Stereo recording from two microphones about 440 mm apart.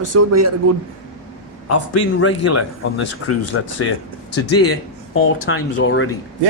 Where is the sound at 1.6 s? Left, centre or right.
Left.